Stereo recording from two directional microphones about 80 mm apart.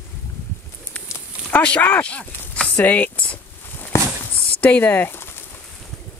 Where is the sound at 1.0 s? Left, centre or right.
Centre.